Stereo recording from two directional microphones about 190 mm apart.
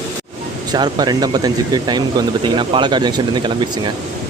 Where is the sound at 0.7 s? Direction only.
20° right (ahead or behind).